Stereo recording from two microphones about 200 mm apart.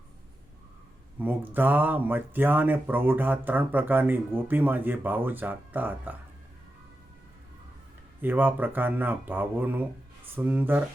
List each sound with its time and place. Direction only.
1.2 s speech: 10° right (ahead or behind)
8.2 s speech: 10° right (ahead or behind)